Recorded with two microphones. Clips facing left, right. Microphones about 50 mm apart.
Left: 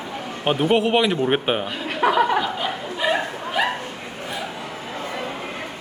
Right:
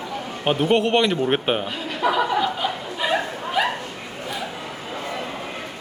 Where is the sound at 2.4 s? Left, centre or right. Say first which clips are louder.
Right 1 dB; centre.